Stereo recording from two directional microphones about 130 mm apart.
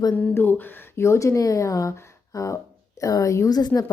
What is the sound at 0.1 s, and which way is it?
A woman's voice, 10° left (ahead or behind).